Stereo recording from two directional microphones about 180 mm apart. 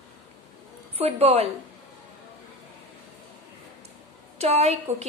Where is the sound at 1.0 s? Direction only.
35° right (ahead or behind).